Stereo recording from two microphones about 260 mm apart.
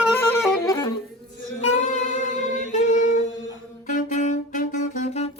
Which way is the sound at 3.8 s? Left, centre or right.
Left.